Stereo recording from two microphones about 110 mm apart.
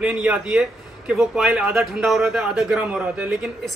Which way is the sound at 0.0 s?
10° right (ahead or behind).